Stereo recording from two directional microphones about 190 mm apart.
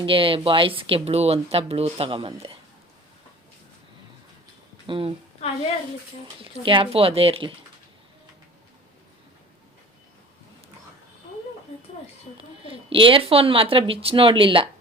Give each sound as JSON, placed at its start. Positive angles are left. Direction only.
{"t": 0.0, "sound": "speech", "side_deg": -30}
{"t": 4.9, "sound": "speech", "side_deg": -30}
{"t": 6.4, "sound": "speech", "side_deg": -25}
{"t": 12.4, "sound": "speech", "side_deg": -30}